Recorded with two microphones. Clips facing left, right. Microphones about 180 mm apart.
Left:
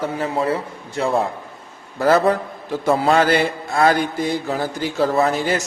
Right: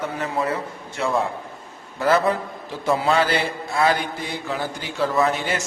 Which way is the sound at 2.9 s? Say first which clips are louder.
Left 4 dB; 45° left (ahead or behind).